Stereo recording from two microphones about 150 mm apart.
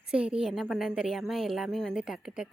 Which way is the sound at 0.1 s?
5° right (ahead or behind).